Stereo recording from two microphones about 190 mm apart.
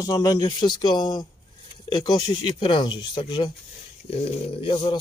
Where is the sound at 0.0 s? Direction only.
20° left (ahead or behind).